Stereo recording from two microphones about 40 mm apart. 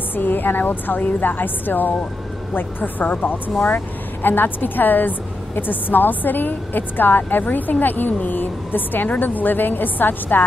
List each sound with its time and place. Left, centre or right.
0.1 s speech: left